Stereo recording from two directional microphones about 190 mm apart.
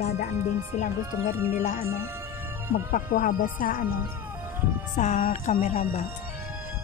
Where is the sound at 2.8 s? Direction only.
45° left (ahead or behind).